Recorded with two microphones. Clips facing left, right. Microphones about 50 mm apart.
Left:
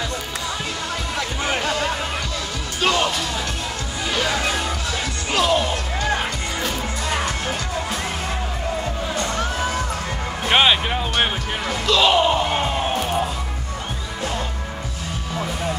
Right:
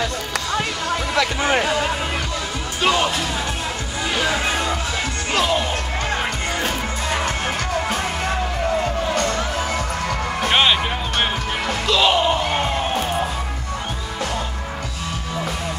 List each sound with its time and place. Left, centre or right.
1.4 s music: centre
4.1 s music: centre
6.6 s music: right
9.1 s music: right
10.5 s music: centre
11.9 s a sound: centre
12.4 s crowd: centre
13.0 s music: centre